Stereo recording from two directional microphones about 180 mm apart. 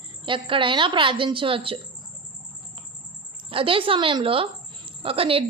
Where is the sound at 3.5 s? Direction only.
30° right (ahead or behind).